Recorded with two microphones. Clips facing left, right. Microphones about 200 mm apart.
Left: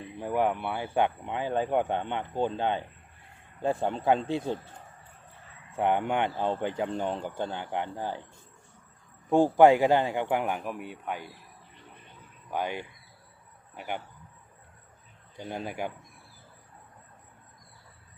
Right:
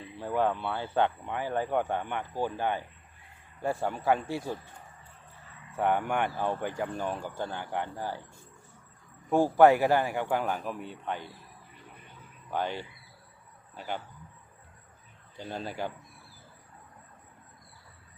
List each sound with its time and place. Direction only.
0.0 s speech: 15° left (ahead or behind)
5.7 s speech: 20° left (ahead or behind)
9.3 s speech: 15° left (ahead or behind)
12.5 s speech: 15° left (ahead or behind)
15.4 s speech: 15° left (ahead or behind)